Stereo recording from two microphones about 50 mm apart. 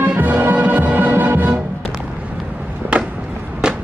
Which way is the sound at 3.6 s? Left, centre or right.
Centre.